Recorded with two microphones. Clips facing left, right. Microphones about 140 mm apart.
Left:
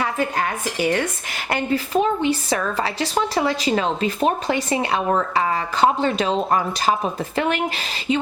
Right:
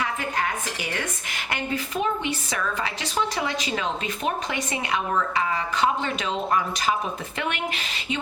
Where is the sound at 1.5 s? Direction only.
35° left (ahead or behind).